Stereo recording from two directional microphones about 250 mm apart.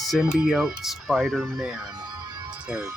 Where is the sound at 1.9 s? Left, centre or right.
Centre.